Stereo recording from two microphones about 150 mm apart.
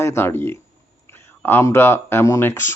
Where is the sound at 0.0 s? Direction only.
15° left (ahead or behind).